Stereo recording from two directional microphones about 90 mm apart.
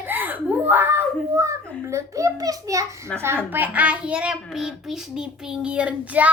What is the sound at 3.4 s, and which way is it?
A child's voice, 20° right (ahead or behind).